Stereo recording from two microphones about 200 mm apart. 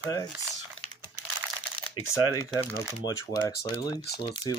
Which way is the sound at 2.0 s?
15° left (ahead or behind).